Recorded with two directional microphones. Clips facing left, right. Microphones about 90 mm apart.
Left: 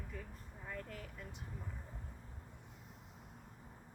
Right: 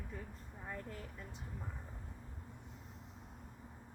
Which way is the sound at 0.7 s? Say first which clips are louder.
Right 1 dB; 25° right (ahead or behind).